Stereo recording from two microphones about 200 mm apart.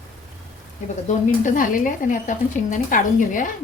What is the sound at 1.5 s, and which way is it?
Speech, 40° left (ahead or behind).